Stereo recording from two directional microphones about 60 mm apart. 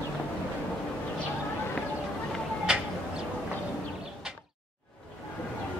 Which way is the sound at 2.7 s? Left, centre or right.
Centre.